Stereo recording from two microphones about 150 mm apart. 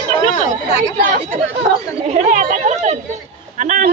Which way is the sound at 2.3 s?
60° right (ahead or behind).